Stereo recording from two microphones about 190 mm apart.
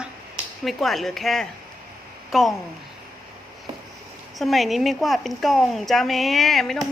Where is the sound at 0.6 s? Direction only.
Centre (ahead or behind).